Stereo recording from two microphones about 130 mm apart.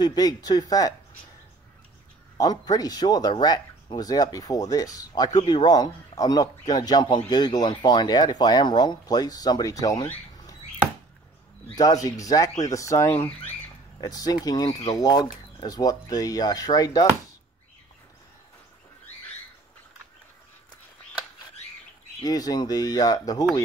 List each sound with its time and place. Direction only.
0.0 s speech: 30° left (ahead or behind)
2.3 s speech: 30° left (ahead or behind)
11.7 s speech: 30° left (ahead or behind)
22.2 s speech: 30° left (ahead or behind)